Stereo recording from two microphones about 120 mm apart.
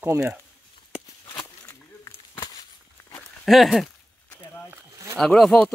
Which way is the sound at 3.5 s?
Centre (ahead or behind).